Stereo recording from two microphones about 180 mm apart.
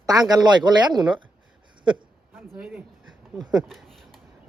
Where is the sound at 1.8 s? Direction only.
25° right (ahead or behind).